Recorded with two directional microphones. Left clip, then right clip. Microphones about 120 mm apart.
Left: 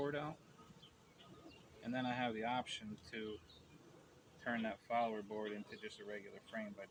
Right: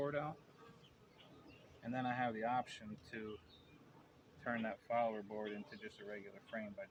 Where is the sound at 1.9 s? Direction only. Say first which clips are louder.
Right 1 dB; 35° right (ahead or behind).